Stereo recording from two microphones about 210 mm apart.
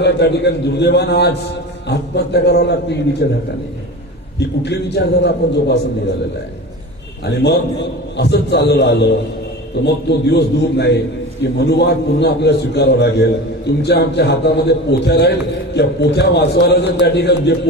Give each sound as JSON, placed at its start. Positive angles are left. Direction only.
{"t": 0.0, "sound": "a man's voice", "side_deg": 55}
{"t": 4.4, "sound": "a man's voice", "side_deg": 55}
{"t": 8.2, "sound": "a man's voice", "side_deg": 55}